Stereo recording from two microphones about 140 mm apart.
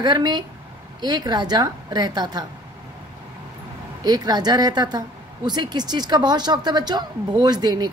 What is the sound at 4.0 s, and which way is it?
Speech, 30° right (ahead or behind).